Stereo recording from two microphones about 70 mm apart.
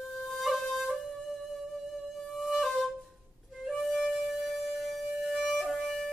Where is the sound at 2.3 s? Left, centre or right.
Centre.